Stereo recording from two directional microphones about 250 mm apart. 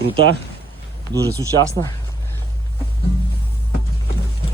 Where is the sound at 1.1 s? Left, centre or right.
Centre.